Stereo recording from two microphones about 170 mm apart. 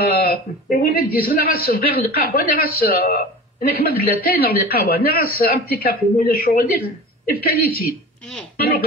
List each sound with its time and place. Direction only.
0.0 s speech: 65° left (ahead or behind)